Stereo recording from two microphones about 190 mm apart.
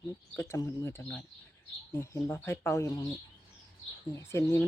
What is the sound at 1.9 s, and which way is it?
Speech, 15° left (ahead or behind).